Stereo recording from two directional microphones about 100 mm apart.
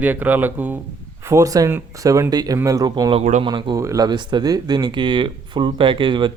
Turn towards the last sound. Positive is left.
turn(degrees=-55)  # may be behind; listen again after turning